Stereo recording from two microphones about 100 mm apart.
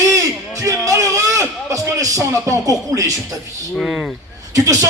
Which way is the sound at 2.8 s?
35° right (ahead or behind).